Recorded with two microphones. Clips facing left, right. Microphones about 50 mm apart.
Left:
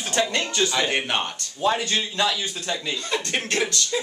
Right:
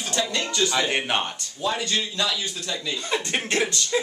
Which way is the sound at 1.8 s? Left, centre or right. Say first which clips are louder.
Left 2 dB; left.